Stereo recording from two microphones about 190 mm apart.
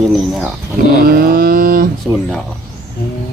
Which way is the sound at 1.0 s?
55° right (ahead or behind).